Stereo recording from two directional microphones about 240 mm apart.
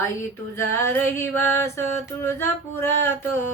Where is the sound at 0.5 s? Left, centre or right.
Centre.